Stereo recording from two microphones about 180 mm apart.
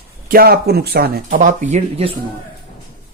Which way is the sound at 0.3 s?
55° right (ahead or behind).